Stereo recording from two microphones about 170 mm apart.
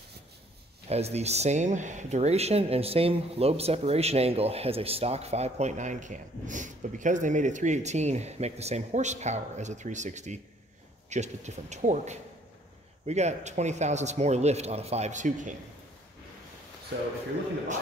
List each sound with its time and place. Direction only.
0.8 s speech: 40° right (ahead or behind)